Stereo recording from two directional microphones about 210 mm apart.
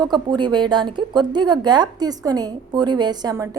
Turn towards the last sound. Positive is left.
turn(degrees=-15)  # may be behind; listen again after turning